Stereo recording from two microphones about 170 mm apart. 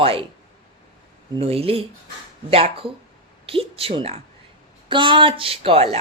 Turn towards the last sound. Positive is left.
turn(degrees=-35)  # may be behind; listen again after turning